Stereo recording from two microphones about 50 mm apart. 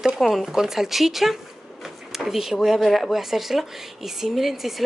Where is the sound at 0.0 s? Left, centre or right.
Centre.